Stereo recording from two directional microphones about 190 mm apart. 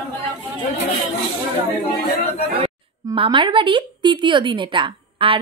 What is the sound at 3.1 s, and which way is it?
Speech, 25° right (ahead or behind).